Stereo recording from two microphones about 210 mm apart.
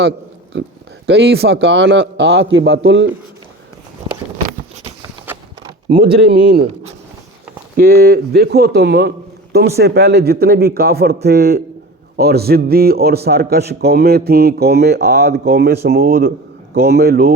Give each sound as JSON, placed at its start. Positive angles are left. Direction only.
{"t": 0.5, "sound": "a man's voice", "side_deg": -60}
{"t": 4.8, "sound": "a sound", "side_deg": -10}
{"t": 6.0, "sound": "a man's voice", "side_deg": -50}
{"t": 7.8, "sound": "a man's voice", "side_deg": -45}